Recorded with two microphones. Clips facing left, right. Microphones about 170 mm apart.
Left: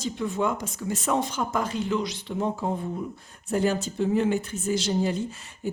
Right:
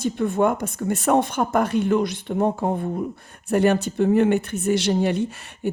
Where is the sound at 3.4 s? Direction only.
65° right (ahead or behind).